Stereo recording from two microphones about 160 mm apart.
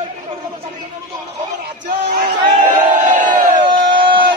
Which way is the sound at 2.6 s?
50° right (ahead or behind).